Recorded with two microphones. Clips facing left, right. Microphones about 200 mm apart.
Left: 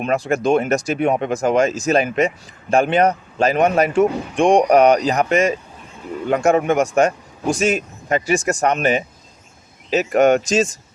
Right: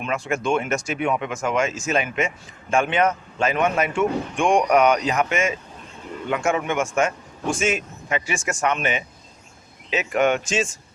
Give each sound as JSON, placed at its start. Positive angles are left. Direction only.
{"t": 0.0, "sound": "speech", "side_deg": 40}